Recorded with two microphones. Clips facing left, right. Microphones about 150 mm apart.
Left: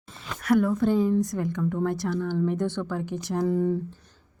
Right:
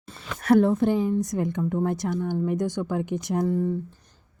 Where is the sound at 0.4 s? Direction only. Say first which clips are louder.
Right 3 dB; 30° right (ahead or behind).